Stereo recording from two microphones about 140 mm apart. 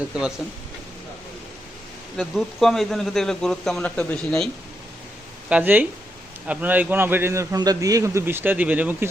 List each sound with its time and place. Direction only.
0.1 s a man's voice: 5° right (ahead or behind)
2.1 s a man's voice: centre (ahead or behind)
5.5 s a man's voice: 10° right (ahead or behind)